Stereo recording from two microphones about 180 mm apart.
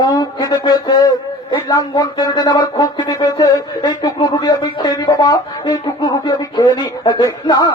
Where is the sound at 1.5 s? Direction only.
20° left (ahead or behind).